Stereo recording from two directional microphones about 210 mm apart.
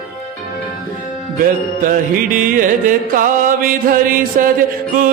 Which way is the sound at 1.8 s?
40° right (ahead or behind).